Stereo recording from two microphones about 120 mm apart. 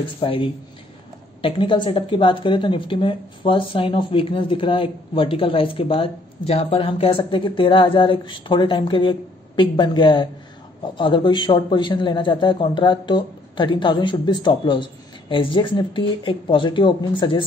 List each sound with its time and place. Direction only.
0.2 s a man's voice: 45° left (ahead or behind)